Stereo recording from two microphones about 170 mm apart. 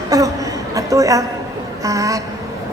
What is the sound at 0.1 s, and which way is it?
A woman's voice, 20° right (ahead or behind).